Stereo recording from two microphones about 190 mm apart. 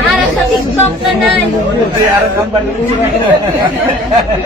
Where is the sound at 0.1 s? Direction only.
5° left (ahead or behind).